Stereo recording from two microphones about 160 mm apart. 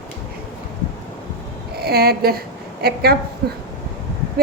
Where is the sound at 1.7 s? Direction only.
80° right.